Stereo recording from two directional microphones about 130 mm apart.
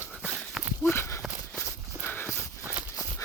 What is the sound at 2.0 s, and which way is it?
Horse, 15° left (ahead or behind).